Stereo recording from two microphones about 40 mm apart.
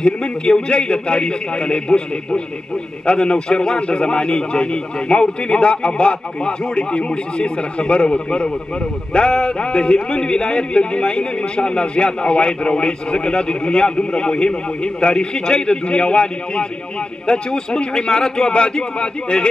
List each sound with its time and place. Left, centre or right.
0.0 s a man's voice: left
3.1 s a man's voice: left